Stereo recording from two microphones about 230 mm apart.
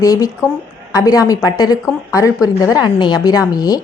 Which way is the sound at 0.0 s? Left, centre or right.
Centre.